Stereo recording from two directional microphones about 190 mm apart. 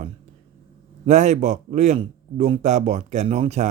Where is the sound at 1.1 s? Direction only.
40° right (ahead or behind).